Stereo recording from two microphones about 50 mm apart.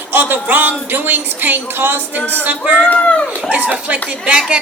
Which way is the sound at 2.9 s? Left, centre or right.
Left.